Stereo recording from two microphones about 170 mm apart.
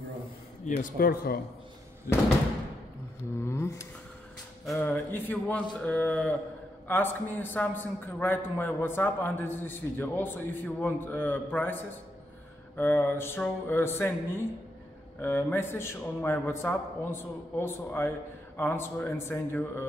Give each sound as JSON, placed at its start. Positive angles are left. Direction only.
{"t": 0.7, "sound": "a man's voice", "side_deg": 55}
{"t": 3.4, "sound": "a man's voice", "side_deg": 15}